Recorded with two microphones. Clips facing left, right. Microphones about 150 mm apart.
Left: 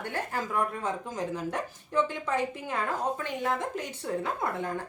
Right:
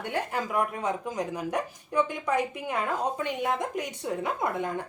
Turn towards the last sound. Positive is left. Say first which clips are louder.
# right 2 dB
turn(degrees=-15)  # may be behind; listen again after turning